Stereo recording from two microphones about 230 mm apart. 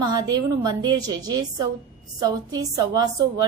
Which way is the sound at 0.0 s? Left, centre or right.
Centre.